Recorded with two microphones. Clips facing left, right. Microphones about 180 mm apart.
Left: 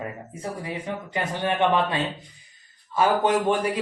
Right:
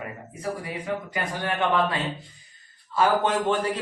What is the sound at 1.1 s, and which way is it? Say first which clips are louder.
A man's voice: left 3 dB; 20° left (ahead or behind).